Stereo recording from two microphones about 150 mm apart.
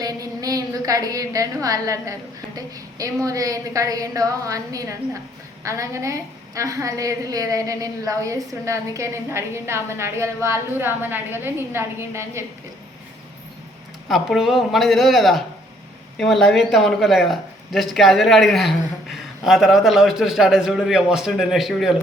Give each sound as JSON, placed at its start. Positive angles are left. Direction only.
{"t": 0.0, "sound": "a sound", "side_deg": -25}
{"t": 2.6, "sound": "a woman's voice", "side_deg": -25}
{"t": 14.1, "sound": "speech", "side_deg": 0}